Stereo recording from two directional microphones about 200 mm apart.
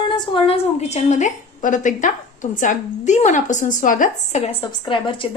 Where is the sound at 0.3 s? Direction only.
30° left (ahead or behind).